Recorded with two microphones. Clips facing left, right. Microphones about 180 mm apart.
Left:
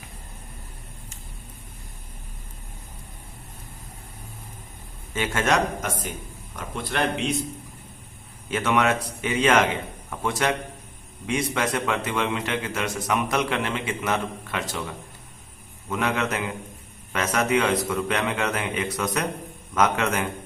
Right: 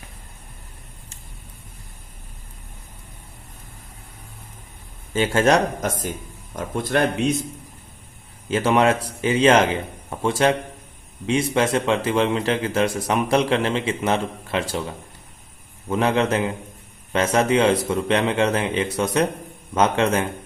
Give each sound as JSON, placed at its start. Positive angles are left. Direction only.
{"t": 5.1, "sound": "a man's voice", "side_deg": -30}
{"t": 8.4, "sound": "a man's voice", "side_deg": -30}